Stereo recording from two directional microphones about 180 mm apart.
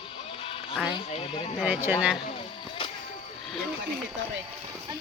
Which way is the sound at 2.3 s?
25° left (ahead or behind).